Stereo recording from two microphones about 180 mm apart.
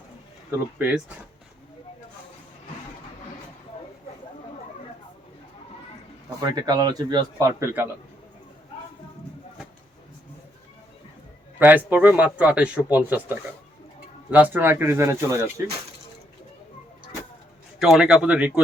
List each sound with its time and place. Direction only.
0.8 s speech: 10° right (ahead or behind)
6.4 s a man's voice: 20° right (ahead or behind)
11.6 s speech: 10° right (ahead or behind)
17.7 s speech: centre (ahead or behind)